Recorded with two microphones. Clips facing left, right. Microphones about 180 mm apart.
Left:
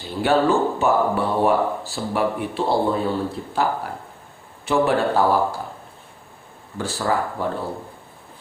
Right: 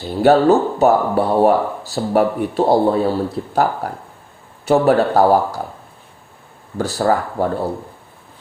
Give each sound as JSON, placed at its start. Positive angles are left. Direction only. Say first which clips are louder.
{"t": 0.2, "sound": "speech", "louder": "right 6 dB", "side_deg": -40}
{"t": 6.7, "sound": "speech", "louder": "right 6 dB", "side_deg": -40}